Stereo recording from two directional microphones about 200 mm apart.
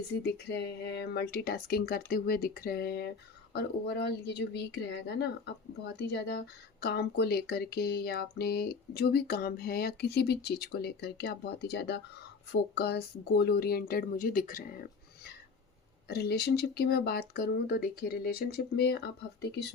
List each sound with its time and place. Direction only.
0.2 s a woman's voice: 55° left (ahead or behind)